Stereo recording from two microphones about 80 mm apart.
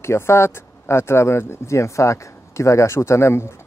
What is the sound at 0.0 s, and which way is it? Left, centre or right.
Speech, left.